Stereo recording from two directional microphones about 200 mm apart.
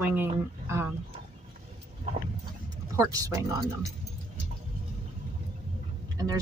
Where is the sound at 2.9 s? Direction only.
15° right (ahead or behind).